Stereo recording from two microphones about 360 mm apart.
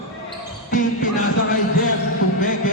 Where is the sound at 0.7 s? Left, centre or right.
Left.